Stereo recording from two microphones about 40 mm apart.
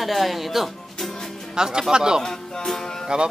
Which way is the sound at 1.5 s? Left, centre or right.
Centre.